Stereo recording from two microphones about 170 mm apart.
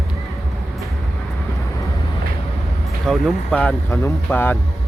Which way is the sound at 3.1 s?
5° left (ahead or behind).